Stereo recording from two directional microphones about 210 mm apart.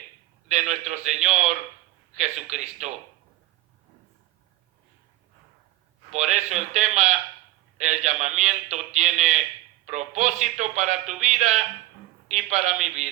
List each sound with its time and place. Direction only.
0.4 s a man's voice: 35° right (ahead or behind)
6.1 s a man's voice: 35° right (ahead or behind)